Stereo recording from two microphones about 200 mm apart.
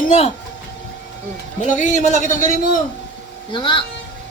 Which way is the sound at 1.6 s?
40° left (ahead or behind).